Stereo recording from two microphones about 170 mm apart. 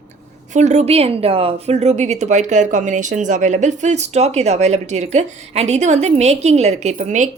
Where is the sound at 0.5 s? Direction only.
40° right (ahead or behind).